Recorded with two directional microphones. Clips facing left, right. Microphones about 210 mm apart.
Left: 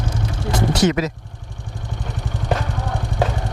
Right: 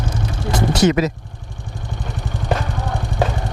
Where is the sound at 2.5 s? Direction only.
20° right (ahead or behind).